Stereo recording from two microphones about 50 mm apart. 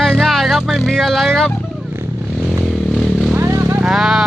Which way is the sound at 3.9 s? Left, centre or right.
Centre.